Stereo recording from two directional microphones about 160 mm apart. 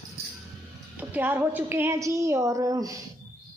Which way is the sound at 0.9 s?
10° right (ahead or behind).